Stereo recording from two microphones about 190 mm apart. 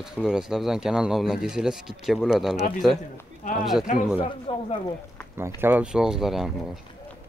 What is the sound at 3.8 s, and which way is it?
Speech, 45° left (ahead or behind).